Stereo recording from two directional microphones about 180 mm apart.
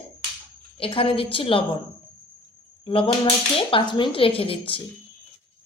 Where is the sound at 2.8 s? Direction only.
30° left (ahead or behind).